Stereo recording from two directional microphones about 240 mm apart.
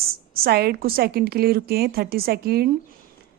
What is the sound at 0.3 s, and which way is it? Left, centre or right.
A woman's voice, right.